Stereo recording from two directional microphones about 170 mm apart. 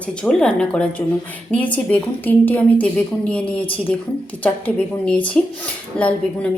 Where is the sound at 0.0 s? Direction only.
5° left (ahead or behind).